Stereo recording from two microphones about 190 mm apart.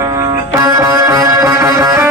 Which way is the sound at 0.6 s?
20° right (ahead or behind).